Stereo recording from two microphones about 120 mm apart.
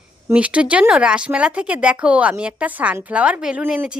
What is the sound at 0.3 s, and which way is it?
A woman's voice, 10° right (ahead or behind).